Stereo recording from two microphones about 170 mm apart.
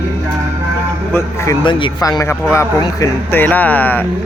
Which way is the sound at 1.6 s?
30° left (ahead or behind).